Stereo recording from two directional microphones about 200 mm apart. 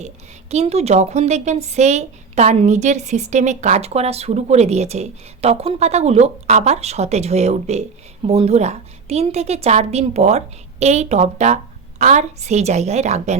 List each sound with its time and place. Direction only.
0.5 s speech: 30° right (ahead or behind)